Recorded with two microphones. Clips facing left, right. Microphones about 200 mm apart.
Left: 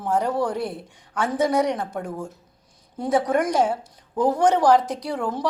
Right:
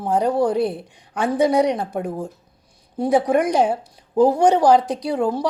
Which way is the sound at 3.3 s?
15° right (ahead or behind).